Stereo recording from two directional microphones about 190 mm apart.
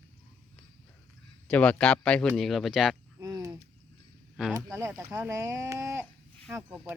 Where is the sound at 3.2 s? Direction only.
20° right (ahead or behind).